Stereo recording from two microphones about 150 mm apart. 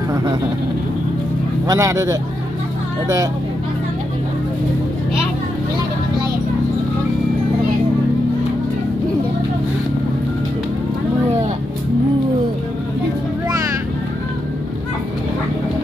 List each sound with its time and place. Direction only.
1.7 s speech: 20° right (ahead or behind)